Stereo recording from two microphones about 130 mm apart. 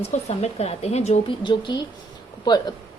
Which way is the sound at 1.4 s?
35° left (ahead or behind).